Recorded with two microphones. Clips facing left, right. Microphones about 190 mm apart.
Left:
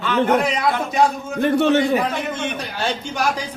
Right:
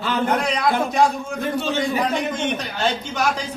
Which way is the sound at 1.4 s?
65° left (ahead or behind).